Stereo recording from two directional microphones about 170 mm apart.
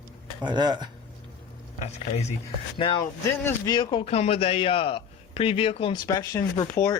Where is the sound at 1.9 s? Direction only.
40° left (ahead or behind).